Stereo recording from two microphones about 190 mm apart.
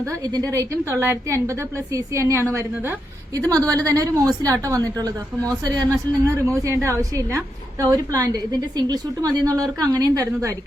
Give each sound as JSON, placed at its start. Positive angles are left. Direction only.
{"t": 0.0, "sound": "a woman's voice", "side_deg": -20}